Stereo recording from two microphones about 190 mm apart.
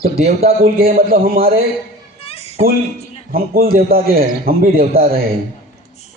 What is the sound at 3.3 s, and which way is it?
A man's voice, 50° right (ahead or behind).